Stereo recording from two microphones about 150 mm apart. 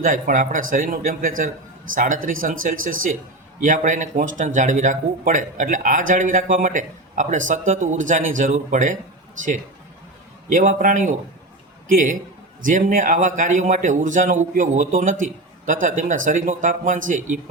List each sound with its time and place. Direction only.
0.0 s speech: 60° right (ahead or behind)
10.5 s speech: 55° right (ahead or behind)
12.6 s speech: 60° right (ahead or behind)